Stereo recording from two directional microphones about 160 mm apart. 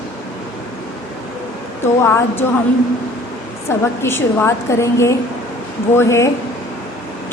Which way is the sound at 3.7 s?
15° left (ahead or behind).